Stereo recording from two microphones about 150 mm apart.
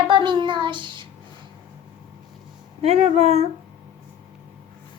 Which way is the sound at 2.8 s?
45° right (ahead or behind).